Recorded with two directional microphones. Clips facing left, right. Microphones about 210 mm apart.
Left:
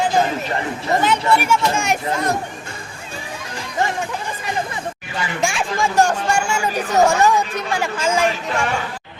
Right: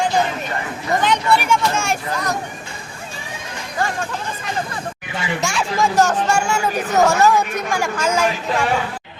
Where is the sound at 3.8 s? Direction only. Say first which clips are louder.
Left 1 dB; 20° left (ahead or behind).